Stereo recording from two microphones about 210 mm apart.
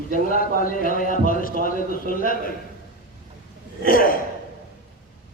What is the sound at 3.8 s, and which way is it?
Speech, 40° left (ahead or behind).